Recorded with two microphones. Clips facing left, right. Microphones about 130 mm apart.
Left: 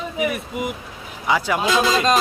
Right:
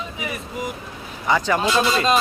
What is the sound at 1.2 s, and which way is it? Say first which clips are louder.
Speech: right 1 dB; 5° left (ahead or behind).